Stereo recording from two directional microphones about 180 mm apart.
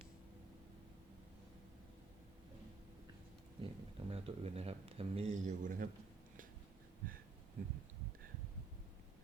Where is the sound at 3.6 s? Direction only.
30° right (ahead or behind); by 5.9 s 50° right (ahead or behind).